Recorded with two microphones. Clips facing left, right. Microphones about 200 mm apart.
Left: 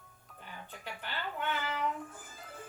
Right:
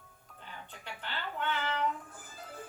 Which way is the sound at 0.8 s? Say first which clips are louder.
Even; 10° left (ahead or behind).